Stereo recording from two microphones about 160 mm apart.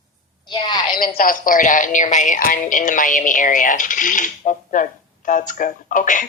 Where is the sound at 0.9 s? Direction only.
65° left (ahead or behind).